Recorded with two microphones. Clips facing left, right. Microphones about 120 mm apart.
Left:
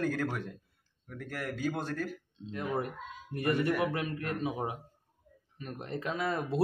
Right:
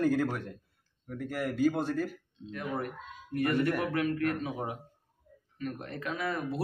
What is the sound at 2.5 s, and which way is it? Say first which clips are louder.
Speech: left 1 dB; 20° left (ahead or behind).